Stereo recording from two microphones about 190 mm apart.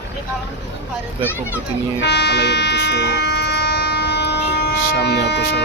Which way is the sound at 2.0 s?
65° left (ahead or behind).